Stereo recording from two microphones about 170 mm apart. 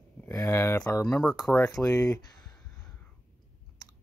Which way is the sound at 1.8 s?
15° left (ahead or behind).